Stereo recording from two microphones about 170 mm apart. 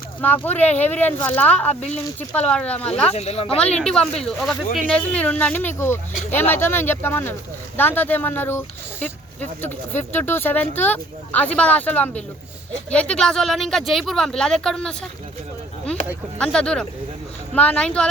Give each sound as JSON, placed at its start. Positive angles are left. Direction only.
{"t": 0.2, "sound": "speech", "side_deg": 10}
{"t": 3.1, "sound": "speech", "side_deg": 40}
{"t": 3.8, "sound": "speech", "side_deg": 5}
{"t": 16.4, "sound": "speech", "side_deg": 5}